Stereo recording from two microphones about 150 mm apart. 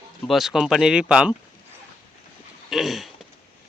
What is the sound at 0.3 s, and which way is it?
Speech, centre (ahead or behind).